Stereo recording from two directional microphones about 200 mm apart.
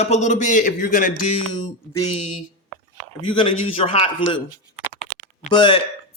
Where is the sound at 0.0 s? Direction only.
35° left (ahead or behind).